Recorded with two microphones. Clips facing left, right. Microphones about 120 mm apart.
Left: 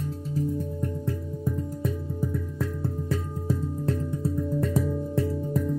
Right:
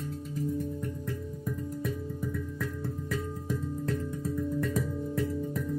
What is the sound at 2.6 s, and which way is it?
Music, 30° left (ahead or behind).